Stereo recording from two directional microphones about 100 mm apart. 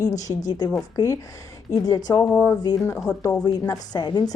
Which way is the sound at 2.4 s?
40° left (ahead or behind).